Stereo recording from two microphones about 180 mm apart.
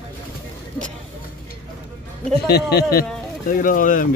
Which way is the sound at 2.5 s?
65° left (ahead or behind).